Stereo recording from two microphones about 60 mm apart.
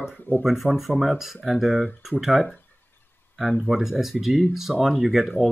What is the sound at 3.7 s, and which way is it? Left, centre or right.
Speech, centre.